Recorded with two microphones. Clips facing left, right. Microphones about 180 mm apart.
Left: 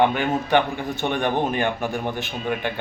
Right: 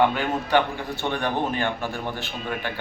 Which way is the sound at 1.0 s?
20° left (ahead or behind).